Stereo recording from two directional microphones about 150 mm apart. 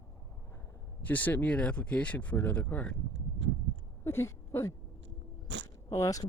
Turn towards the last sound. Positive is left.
turn(degrees=20)  # may be behind; listen again after turning